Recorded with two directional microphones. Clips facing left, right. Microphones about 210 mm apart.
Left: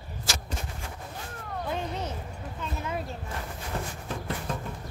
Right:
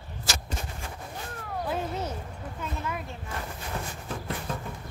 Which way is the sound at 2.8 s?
30° left (ahead or behind).